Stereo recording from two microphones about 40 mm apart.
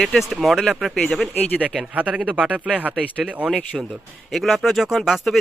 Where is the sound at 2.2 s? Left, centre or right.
Right.